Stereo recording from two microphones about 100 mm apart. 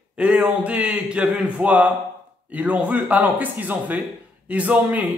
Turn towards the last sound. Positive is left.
turn(degrees=-15)  # may be behind; listen again after turning